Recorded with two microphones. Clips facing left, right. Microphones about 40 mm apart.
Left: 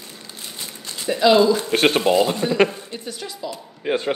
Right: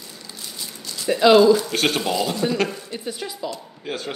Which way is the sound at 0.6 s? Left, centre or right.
Left.